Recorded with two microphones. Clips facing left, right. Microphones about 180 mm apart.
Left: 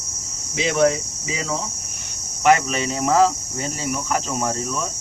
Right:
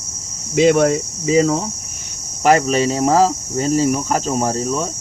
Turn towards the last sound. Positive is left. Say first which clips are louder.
# right 5 dB
turn(degrees=-30)  # may be behind; listen again after turning